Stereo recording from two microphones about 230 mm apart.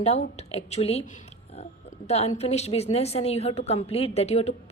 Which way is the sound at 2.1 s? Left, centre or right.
Left.